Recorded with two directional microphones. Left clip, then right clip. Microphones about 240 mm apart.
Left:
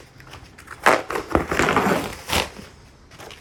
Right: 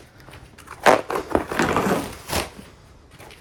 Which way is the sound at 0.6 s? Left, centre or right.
Right.